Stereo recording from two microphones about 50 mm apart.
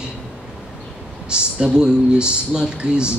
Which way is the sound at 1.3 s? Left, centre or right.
Centre.